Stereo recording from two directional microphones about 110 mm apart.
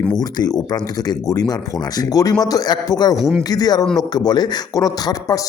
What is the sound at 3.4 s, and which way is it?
Speech, 35° left (ahead or behind).